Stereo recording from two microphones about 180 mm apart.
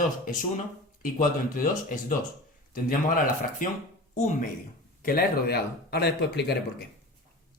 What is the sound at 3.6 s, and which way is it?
Speech, 50° left (ahead or behind).